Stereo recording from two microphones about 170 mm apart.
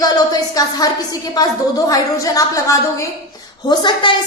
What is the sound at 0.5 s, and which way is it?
A woman's voice, 20° left (ahead or behind).